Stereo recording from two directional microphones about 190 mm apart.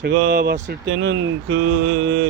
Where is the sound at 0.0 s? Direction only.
55° right (ahead or behind).